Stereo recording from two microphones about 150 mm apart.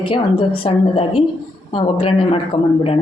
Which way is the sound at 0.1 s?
35° left (ahead or behind).